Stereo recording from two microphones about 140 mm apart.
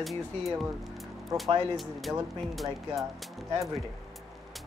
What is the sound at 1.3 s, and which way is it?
Speech, centre (ahead or behind).